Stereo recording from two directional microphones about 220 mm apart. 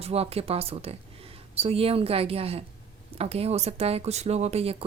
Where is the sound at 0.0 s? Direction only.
25° right (ahead or behind).